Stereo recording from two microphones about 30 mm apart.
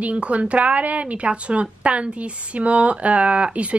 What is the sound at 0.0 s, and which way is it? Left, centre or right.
A woman's voice, right.